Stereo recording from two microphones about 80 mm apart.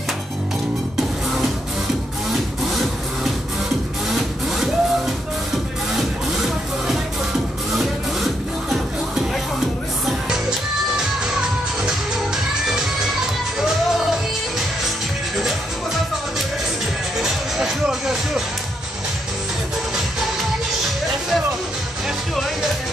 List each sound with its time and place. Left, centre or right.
4.1 s music: centre
7.7 s music: centre
17.2 s music: centre
22.3 s music: centre